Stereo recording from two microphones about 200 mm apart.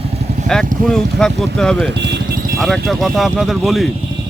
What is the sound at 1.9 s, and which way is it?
Vehicle, 60° right (ahead or behind).